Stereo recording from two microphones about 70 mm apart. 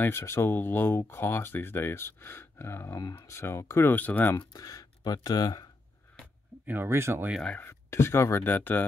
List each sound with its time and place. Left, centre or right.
0.0 s speech: left
3.9 s speech: left
4.4 s speech: left
6.6 s speech: right
7.6 s speech: left